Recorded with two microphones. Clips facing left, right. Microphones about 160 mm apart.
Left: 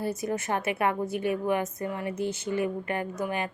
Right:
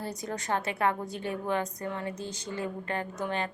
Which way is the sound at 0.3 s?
15° left (ahead or behind).